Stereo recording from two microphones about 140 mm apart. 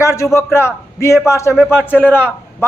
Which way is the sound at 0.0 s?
20° left (ahead or behind).